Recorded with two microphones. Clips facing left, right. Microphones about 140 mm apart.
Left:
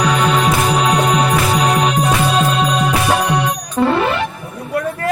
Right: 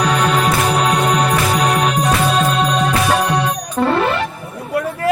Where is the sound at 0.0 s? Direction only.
Centre (ahead or behind).